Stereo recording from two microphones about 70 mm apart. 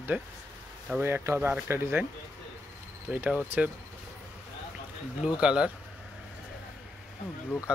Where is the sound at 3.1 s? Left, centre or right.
Right.